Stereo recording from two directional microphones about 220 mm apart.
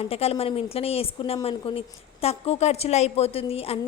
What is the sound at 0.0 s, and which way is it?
A woman's voice, 25° left (ahead or behind).